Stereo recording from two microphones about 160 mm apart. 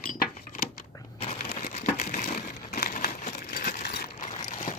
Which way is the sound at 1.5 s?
40° left (ahead or behind).